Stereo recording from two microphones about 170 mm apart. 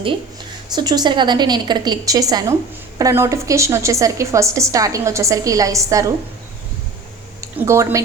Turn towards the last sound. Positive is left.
turn(degrees=-15)  # may be behind; listen again after turning